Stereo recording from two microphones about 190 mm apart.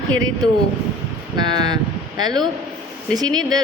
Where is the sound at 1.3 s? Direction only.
20° right (ahead or behind).